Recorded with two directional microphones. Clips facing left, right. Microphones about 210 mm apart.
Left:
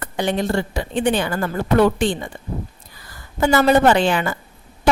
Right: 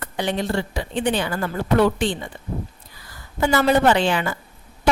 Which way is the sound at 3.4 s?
45° left (ahead or behind).